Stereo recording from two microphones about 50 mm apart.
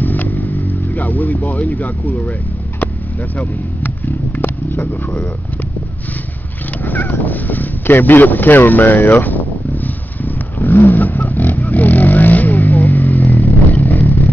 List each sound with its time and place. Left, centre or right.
0.0 s vehicle: left
0.9 s speech: left
3.3 s speech: left
6.8 s speech: left
10.2 s vehicle: left